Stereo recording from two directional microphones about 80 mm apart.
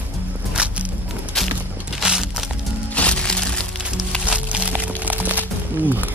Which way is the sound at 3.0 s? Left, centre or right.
Centre.